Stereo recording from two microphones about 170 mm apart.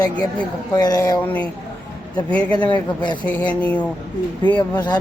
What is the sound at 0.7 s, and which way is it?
Speech, 20° left (ahead or behind).